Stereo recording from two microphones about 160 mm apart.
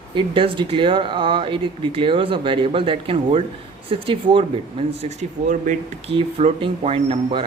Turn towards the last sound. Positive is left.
turn(degrees=-35)  # may be behind; listen again after turning